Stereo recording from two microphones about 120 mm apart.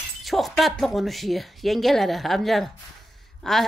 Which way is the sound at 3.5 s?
5° left (ahead or behind).